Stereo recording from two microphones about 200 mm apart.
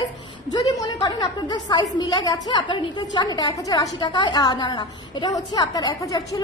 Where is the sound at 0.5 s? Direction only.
20° left (ahead or behind).